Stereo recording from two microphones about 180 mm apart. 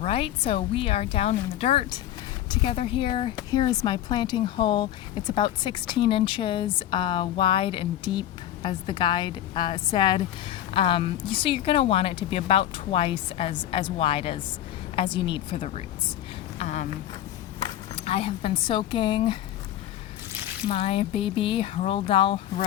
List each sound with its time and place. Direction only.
0.0 s a woman's voice: 30° left (ahead or behind)
17.9 s a woman's voice: 35° left (ahead or behind)
20.7 s speech: 35° left (ahead or behind)